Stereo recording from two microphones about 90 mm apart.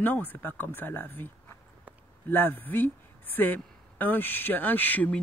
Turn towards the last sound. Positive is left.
turn(degrees=20)  # may be behind; listen again after turning